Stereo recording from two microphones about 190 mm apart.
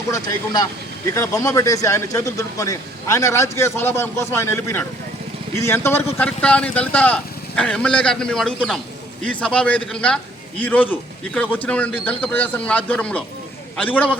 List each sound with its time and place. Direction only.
0.1 s speech: 20° left (ahead or behind)